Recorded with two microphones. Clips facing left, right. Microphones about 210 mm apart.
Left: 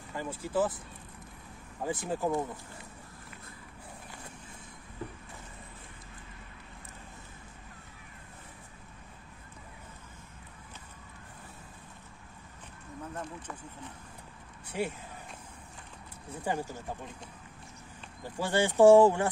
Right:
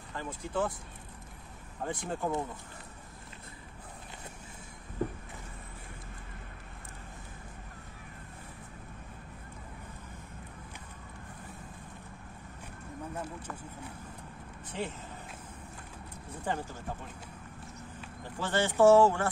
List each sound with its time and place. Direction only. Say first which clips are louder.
0.1 s speech: left 3 dB; 10° left (ahead or behind)
1.8 s speech: left 2 dB; 5° left (ahead or behind)
5.0 s vehicle: right 8 dB; 45° right (ahead or behind)
14.7 s speech: left 4 dB; 10° left (ahead or behind)
16.4 s speech: left 2 dB; 10° left (ahead or behind)
18.2 s speech: left 2 dB; 10° left (ahead or behind)